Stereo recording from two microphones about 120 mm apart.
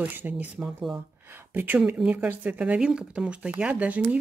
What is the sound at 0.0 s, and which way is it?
Speech, 15° right (ahead or behind).